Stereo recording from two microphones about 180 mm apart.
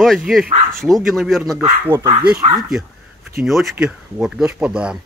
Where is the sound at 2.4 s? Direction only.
35° right (ahead or behind).